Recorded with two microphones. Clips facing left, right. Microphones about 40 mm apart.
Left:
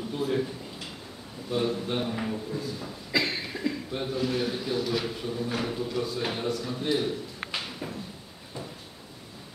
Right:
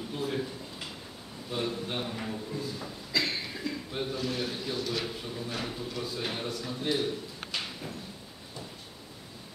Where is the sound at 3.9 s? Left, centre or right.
Centre.